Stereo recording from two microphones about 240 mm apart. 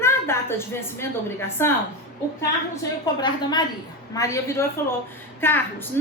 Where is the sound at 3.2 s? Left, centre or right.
Centre.